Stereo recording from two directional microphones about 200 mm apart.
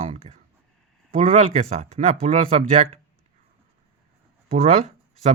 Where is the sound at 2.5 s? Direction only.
30° right (ahead or behind).